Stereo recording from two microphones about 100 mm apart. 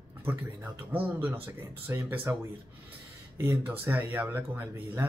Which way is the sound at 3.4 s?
25° right (ahead or behind).